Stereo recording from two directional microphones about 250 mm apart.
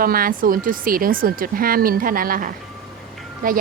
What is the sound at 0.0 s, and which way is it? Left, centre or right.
Speech, right.